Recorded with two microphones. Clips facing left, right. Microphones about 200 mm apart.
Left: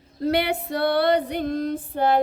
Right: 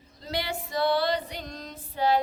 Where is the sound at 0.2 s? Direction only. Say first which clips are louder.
Left 10 dB; 60° left (ahead or behind).